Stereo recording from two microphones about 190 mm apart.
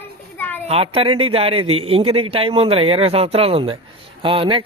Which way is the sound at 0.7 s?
30° right (ahead or behind).